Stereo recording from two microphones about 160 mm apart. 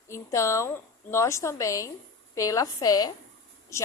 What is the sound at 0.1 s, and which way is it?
A woman's voice, 20° left (ahead or behind).